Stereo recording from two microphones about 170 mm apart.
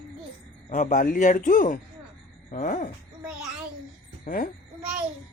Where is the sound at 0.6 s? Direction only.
45° left (ahead or behind).